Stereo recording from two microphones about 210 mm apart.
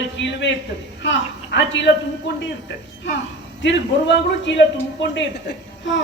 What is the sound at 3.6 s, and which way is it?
A woman's voice, 60° left (ahead or behind).